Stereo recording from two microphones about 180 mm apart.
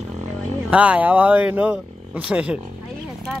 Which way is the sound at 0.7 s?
5° right (ahead or behind).